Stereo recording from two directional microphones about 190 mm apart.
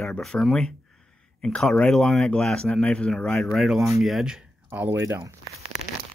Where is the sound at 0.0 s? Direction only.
Centre (ahead or behind); by 5.3 s 15° right (ahead or behind).